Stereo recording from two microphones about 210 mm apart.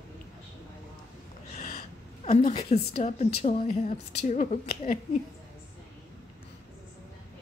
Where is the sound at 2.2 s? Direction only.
30° left (ahead or behind).